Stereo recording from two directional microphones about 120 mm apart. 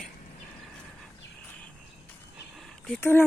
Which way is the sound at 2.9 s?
15° left (ahead or behind).